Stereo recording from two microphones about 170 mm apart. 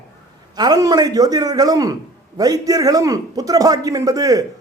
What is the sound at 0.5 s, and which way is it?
A man's voice, 25° right (ahead or behind).